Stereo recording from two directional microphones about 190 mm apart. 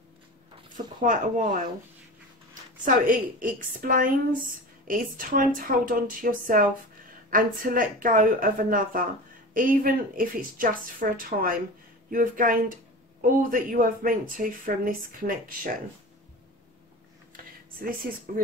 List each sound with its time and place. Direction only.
1.0 s speech: 40° right (ahead or behind)
2.8 s speech: 45° right (ahead or behind)
17.7 s speech: 50° right (ahead or behind)